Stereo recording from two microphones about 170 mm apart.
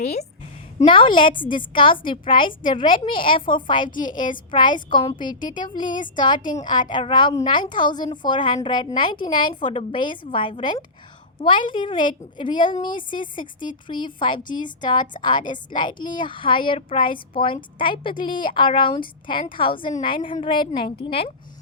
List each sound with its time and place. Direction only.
0.0 s a woman's voice: 40° left (ahead or behind)
0.8 s a woman's voice: 30° left (ahead or behind)